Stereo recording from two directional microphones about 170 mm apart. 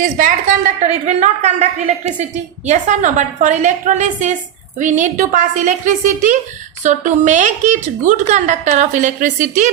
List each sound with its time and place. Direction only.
0.0 s a woman's voice: 50° right (ahead or behind)